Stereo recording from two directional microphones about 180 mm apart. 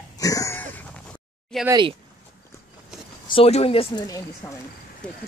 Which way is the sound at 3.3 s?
35° left (ahead or behind).